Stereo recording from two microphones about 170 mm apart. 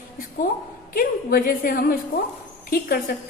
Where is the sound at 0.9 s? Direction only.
60° left (ahead or behind).